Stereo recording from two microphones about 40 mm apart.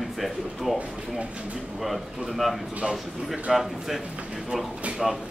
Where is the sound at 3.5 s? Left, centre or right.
Centre.